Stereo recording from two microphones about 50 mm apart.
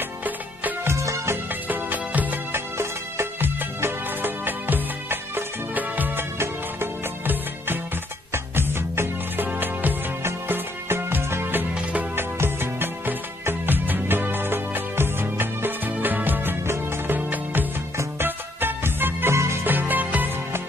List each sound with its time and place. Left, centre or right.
0.9 s music: right
1.5 s music: right
6.3 s music: right
7.2 s music: right
9.5 s music: right
10.2 s music: right
11.7 s music: right
12.2 s music: right
19.3 s music: right
19.6 s music: right